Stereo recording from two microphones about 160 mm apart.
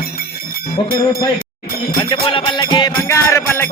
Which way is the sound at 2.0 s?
30° left (ahead or behind).